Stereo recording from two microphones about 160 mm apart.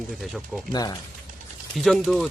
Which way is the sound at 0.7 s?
25° left (ahead or behind).